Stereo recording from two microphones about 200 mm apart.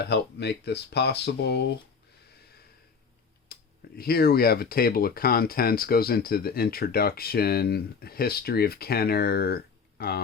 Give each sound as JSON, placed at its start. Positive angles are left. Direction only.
{"t": 0.0, "sound": "speech", "side_deg": 55}
{"t": 3.5, "sound": "speech", "side_deg": 50}